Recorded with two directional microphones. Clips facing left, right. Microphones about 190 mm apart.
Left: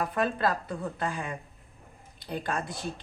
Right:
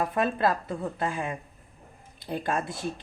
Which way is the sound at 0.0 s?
25° right (ahead or behind).